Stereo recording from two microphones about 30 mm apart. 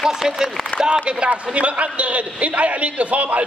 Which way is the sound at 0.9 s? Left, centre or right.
Right.